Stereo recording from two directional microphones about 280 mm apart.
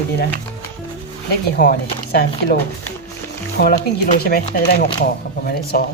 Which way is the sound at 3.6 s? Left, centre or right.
Left.